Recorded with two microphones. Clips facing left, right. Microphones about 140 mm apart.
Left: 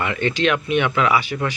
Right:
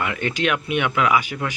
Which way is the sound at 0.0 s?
5° right (ahead or behind).